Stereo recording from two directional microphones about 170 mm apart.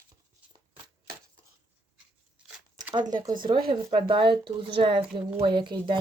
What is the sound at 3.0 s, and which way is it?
A woman's voice, 25° right (ahead or behind).